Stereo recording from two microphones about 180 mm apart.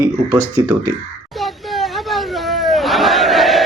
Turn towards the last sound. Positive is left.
turn(degrees=0)  # may be behind; listen again after turning